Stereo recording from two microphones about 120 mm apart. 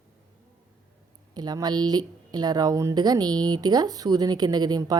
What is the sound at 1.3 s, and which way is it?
Speech, 35° right (ahead or behind).